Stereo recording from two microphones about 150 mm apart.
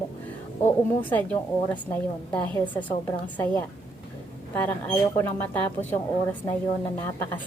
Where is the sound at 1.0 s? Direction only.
10° left (ahead or behind).